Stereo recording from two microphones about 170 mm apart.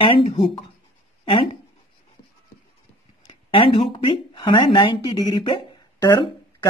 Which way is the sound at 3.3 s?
30° left (ahead or behind).